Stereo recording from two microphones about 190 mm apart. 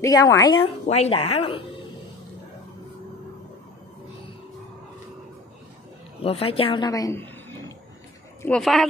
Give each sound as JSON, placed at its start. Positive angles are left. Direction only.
{"t": 0.0, "sound": "a woman's voice", "side_deg": 20}
{"t": 0.8, "sound": "a woman's voice", "side_deg": 35}
{"t": 6.2, "sound": "speech", "side_deg": 30}